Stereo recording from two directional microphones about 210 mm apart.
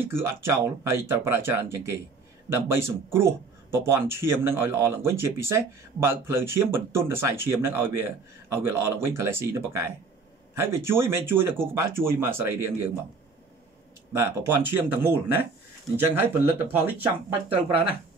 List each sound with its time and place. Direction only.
0.0 s speech: 10° right (ahead or behind)
14.1 s speech: 10° right (ahead or behind)